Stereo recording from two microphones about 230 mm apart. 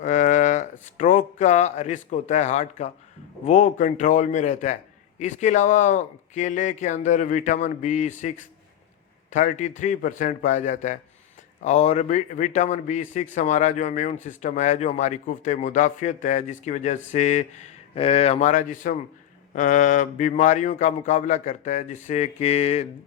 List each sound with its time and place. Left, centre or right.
0.0 s a sound: left
3.4 s a man's voice: left
9.3 s a man's voice: left